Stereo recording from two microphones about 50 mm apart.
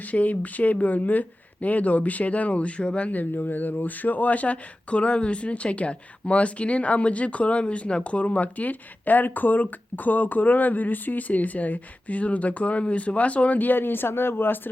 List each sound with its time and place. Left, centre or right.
0.1 s speech: left